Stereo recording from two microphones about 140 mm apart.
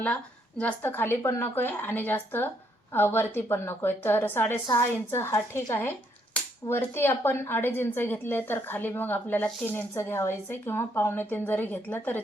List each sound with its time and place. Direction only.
0.6 s speech: 15° left (ahead or behind)